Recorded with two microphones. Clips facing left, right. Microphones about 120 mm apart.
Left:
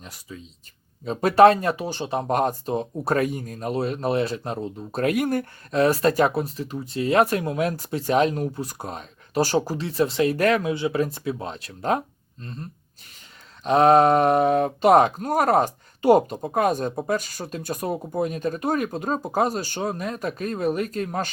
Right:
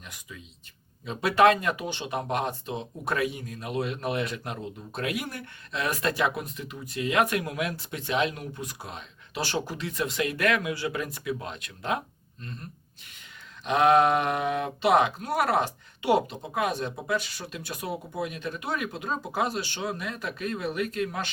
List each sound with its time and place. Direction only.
0.0 s speech: 35° left (ahead or behind)
13.7 s speech: 35° left (ahead or behind)